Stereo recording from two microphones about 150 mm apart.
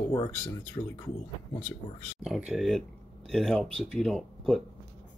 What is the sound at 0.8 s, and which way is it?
Speech, 35° left (ahead or behind).